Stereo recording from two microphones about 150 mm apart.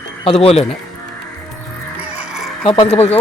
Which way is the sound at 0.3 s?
40° left (ahead or behind).